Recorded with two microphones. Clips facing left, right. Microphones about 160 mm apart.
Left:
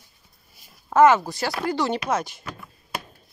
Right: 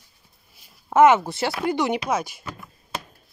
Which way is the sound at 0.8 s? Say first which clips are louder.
Right 1 dB; 20° right (ahead or behind).